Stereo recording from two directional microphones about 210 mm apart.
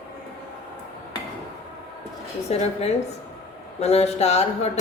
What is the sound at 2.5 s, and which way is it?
A woman's voice, 30° left (ahead or behind).